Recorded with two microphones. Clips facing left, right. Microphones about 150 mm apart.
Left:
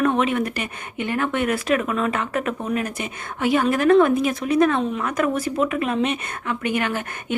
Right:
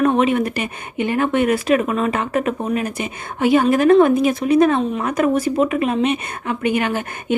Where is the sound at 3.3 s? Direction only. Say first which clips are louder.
Right 5 dB; 30° right (ahead or behind).